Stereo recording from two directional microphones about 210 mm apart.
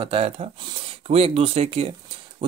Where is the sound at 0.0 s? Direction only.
30° right (ahead or behind).